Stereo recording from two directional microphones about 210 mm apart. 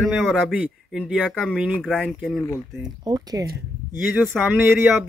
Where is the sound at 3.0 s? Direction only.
20° right (ahead or behind).